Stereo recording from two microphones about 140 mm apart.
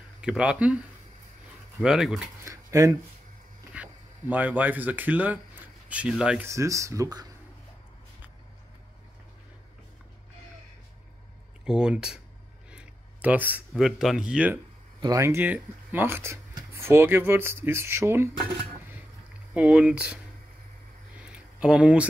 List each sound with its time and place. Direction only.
0.2 s speech: 5° right (ahead or behind)
2.4 s speech: 20° right (ahead or behind)
3.7 s speech: 10° right (ahead or behind)
6.5 s speech: 20° right (ahead or behind)
11.6 s speech: 5° right (ahead or behind)
15.0 s speech: 25° right (ahead or behind)
19.5 s speech: 10° right (ahead or behind)
21.5 s speech: 5° right (ahead or behind)